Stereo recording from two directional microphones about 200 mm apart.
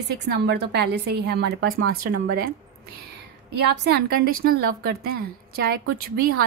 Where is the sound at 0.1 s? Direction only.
55° right (ahead or behind).